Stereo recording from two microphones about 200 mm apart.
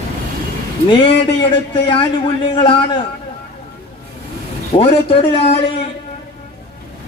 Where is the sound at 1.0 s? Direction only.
30° left (ahead or behind).